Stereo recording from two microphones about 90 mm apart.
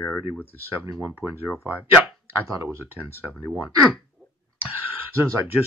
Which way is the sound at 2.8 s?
20° right (ahead or behind).